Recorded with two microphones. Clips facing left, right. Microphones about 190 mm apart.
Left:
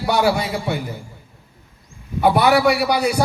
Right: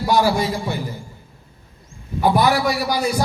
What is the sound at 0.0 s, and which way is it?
Speech, 65° left (ahead or behind).